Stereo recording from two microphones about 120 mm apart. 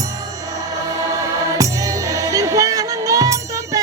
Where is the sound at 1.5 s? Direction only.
30° right (ahead or behind).